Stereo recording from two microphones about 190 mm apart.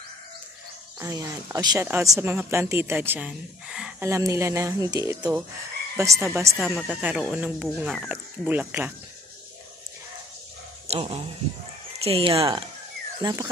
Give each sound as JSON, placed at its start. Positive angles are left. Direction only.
{"t": 0.9, "sound": "speech", "side_deg": -15}
{"t": 4.1, "sound": "speech", "side_deg": -15}
{"t": 10.9, "sound": "speech", "side_deg": -30}
{"t": 12.4, "sound": "speech", "side_deg": -20}